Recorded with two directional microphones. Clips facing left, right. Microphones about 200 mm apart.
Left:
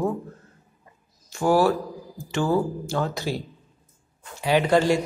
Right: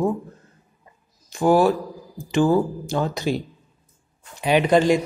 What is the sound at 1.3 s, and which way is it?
A woman's voice, 15° right (ahead or behind).